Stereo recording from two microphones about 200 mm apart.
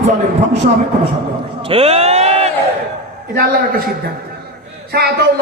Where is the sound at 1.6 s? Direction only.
30° right (ahead or behind).